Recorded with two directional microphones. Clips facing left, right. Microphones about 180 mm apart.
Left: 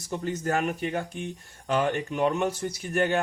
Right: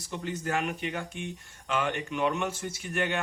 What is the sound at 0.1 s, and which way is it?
Speech, 40° left (ahead or behind).